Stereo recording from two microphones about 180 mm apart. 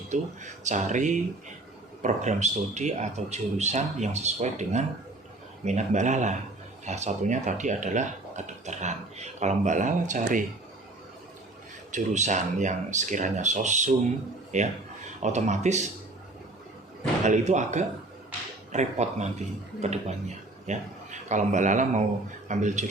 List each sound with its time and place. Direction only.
0.1 s speech: 40° right (ahead or behind)
11.9 s speech: 40° right (ahead or behind)
17.2 s speech: 40° right (ahead or behind)